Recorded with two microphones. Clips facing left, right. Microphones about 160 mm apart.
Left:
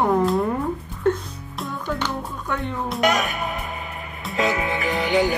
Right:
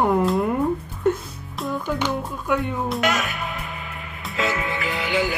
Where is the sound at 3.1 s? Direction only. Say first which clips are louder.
Left 2 dB; 40° left (ahead or behind).